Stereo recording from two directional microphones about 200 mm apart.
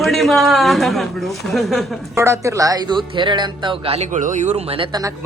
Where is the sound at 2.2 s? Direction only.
15° right (ahead or behind).